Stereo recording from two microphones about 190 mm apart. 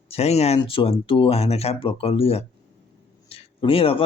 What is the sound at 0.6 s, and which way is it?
Speech, 30° left (ahead or behind).